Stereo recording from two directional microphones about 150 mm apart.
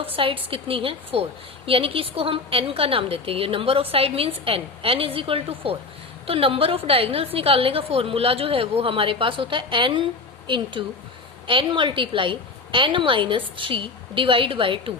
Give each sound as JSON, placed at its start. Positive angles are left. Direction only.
{"t": 0.0, "sound": "a woman's voice", "side_deg": -40}